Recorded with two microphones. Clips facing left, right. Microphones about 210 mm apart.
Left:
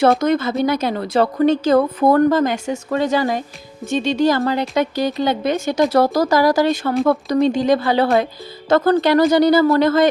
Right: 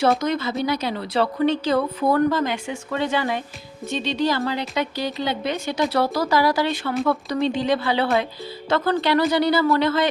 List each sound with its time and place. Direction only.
0.0 s a woman's voice: 50° left (ahead or behind)